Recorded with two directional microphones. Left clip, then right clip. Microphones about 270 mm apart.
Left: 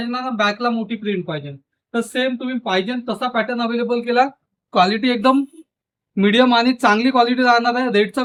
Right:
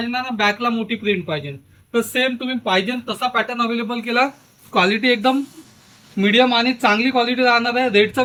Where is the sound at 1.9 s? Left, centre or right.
Centre.